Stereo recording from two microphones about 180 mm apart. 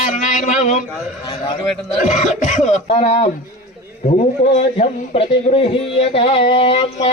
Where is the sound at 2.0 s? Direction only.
45° left (ahead or behind).